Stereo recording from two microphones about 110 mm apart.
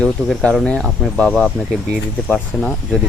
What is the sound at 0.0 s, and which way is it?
Speech, 10° left (ahead or behind).